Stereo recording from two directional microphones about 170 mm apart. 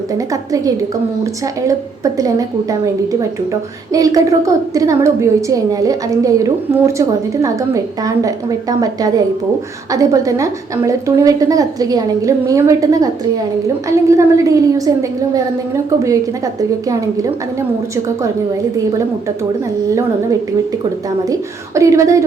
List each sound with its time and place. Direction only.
2.1 s a woman's voice: 20° right (ahead or behind)
16.6 s a woman's voice: 20° right (ahead or behind)
21.8 s a woman's voice: 20° right (ahead or behind)